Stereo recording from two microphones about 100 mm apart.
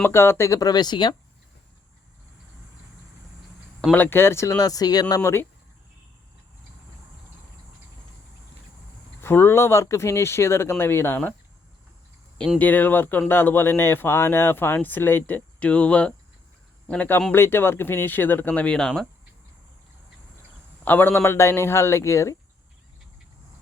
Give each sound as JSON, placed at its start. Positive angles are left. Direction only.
{"t": 0.0, "sound": "speech", "side_deg": 25}
{"t": 3.9, "sound": "speech", "side_deg": 20}
{"t": 5.2, "sound": "speech", "side_deg": 25}
{"t": 9.2, "sound": "speech", "side_deg": 25}
{"t": 12.5, "sound": "speech", "side_deg": 20}
{"t": 20.8, "sound": "speech", "side_deg": 20}